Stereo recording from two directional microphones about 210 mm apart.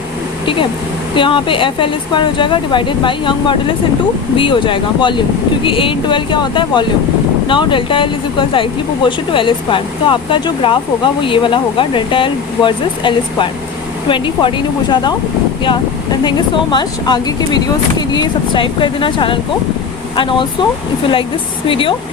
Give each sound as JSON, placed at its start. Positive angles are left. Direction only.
{"t": 1.1, "sound": "speech", "side_deg": 25}
{"t": 16.7, "sound": "speech", "side_deg": 20}
{"t": 21.7, "sound": "speech", "side_deg": 25}